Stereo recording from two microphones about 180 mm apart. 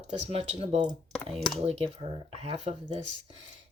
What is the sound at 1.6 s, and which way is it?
Speech, 35° right (ahead or behind).